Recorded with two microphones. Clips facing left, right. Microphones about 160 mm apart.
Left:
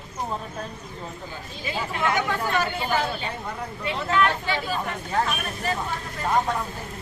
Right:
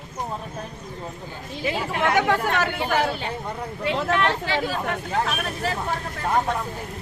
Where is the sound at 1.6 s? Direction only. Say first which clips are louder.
Right 3 dB; 70° right (ahead or behind).